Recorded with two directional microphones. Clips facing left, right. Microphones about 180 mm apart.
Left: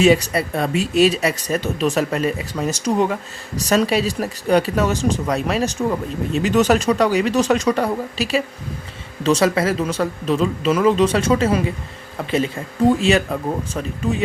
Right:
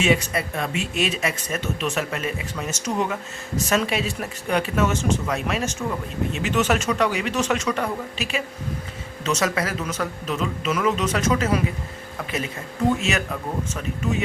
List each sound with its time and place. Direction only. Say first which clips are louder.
0.0 s speech: left 6 dB; 35° left (ahead or behind)